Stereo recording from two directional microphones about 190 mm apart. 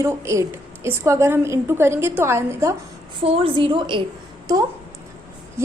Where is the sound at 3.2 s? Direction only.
30° right (ahead or behind).